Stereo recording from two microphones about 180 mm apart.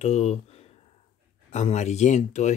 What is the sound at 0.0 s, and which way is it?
Speech, 35° left (ahead or behind).